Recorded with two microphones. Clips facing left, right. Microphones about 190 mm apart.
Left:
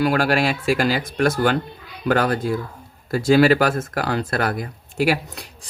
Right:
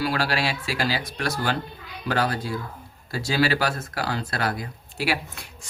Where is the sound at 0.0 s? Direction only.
50° left (ahead or behind).